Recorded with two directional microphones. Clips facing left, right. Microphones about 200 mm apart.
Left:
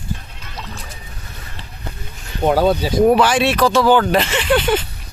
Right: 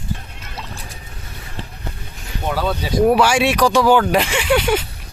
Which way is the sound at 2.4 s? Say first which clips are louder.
Left 7 dB; 45° left (ahead or behind).